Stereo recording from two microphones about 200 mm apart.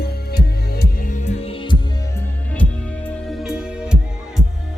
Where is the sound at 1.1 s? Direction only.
35° left (ahead or behind).